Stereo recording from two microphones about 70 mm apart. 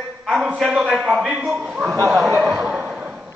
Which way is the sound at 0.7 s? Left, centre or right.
Centre.